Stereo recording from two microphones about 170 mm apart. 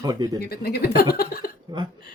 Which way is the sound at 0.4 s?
65° left (ahead or behind).